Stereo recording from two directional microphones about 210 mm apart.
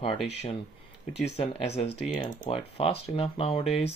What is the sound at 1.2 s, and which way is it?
Speech, 30° left (ahead or behind).